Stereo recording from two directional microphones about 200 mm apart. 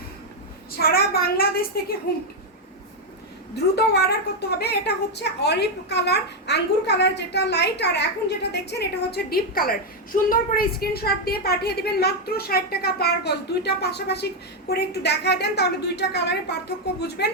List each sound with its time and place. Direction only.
0.8 s a woman's voice: 50° left (ahead or behind)
3.5 s a woman's voice: 55° left (ahead or behind)